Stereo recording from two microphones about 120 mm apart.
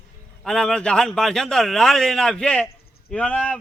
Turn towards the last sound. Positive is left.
turn(degrees=10)  # may be behind; listen again after turning